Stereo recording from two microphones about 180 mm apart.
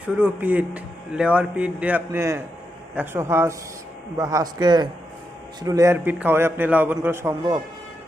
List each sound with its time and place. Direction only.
0.2 s speech: 10° right (ahead or behind)